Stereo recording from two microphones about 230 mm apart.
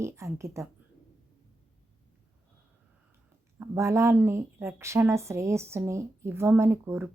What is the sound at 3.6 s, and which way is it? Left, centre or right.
A woman's voice, centre.